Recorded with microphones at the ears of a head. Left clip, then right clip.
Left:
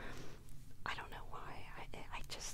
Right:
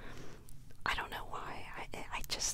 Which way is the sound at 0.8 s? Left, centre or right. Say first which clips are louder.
Right 8 dB; right.